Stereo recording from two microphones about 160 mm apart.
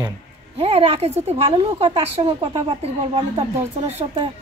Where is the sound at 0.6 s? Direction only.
40° right (ahead or behind).